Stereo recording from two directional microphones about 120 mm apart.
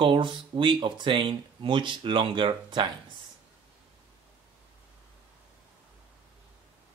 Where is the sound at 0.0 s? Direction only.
45° right (ahead or behind).